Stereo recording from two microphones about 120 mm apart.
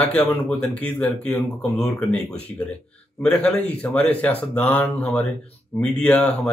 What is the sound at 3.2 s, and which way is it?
Speech, 15° left (ahead or behind).